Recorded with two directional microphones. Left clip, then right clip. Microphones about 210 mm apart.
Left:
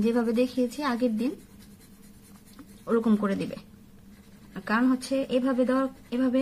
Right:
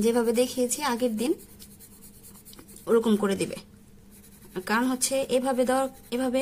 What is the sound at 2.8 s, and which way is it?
Speech, 50° right (ahead or behind).